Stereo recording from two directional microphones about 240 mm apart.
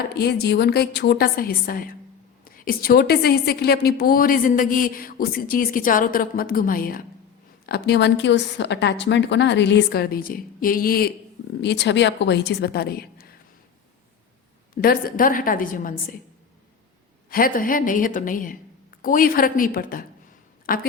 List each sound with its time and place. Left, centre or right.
0.1 s a woman's voice: left
14.8 s a woman's voice: left
17.2 s a woman's voice: left